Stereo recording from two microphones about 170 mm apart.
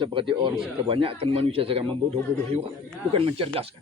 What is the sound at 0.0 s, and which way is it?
Speech, 30° right (ahead or behind).